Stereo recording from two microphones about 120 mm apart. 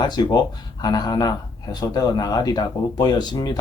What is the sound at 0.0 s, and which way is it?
Speech, 35° left (ahead or behind).